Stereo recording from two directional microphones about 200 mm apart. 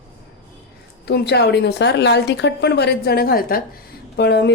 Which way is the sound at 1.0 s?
55° left (ahead or behind).